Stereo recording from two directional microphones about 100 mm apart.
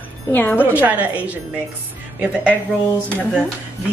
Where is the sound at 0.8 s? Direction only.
15° right (ahead or behind).